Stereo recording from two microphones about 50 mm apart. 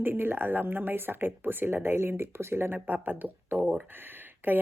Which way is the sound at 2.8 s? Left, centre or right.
Right.